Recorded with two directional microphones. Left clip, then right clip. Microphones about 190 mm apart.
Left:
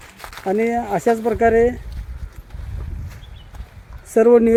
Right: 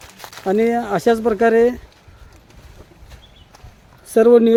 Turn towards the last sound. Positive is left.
turn(degrees=-15)  # may be behind; listen again after turning